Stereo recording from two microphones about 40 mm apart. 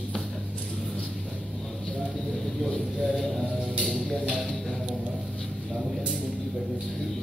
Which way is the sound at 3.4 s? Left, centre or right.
Centre.